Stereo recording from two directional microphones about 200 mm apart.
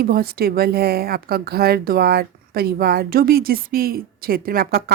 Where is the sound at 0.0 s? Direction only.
50° right (ahead or behind).